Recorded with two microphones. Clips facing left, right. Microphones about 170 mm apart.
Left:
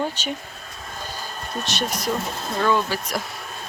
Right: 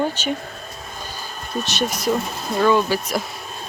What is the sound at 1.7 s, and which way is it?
Speech, 5° right (ahead or behind).